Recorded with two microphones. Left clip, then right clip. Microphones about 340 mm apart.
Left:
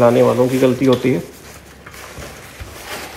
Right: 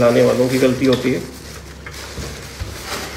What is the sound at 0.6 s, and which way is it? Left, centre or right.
Speech, centre.